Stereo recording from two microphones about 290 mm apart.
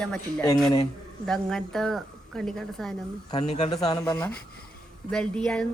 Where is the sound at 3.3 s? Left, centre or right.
Left; by 5.7 s centre.